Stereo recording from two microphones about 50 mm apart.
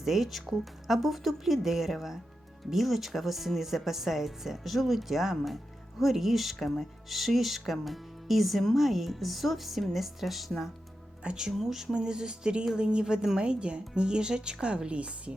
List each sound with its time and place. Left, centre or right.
0.0 s speech: centre
11.2 s a woman's voice: centre